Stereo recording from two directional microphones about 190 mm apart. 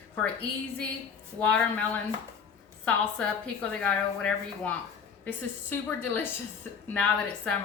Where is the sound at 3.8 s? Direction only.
5° left (ahead or behind).